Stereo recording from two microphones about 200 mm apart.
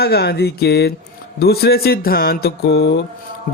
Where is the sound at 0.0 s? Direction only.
55° left (ahead or behind).